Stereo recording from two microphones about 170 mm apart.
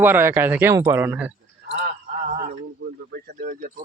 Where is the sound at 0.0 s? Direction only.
15° right (ahead or behind).